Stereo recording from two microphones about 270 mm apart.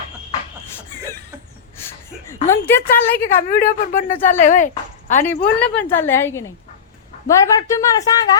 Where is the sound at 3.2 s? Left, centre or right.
Left.